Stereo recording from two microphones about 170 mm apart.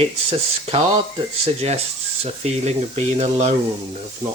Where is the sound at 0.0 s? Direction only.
35° right (ahead or behind).